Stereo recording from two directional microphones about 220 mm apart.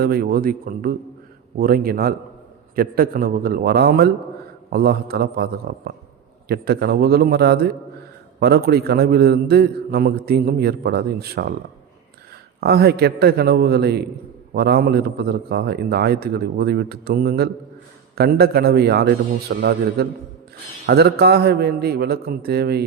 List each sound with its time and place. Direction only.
0.0 s a man's voice: 45° right (ahead or behind)
12.5 s a man's voice: 45° right (ahead or behind)